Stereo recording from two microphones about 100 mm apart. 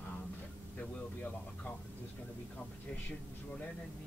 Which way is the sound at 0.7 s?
15° left (ahead or behind).